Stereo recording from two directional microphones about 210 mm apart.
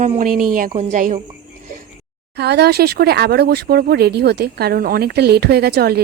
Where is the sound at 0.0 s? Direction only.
35° right (ahead or behind).